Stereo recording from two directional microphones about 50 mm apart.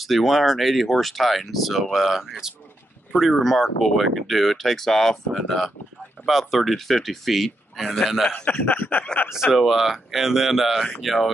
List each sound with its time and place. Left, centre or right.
0.0 s speech: centre
8.3 s a man's voice: left
9.5 s speech: centre